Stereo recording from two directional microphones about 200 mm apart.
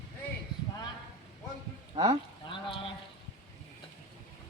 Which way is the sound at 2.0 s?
30° right (ahead or behind).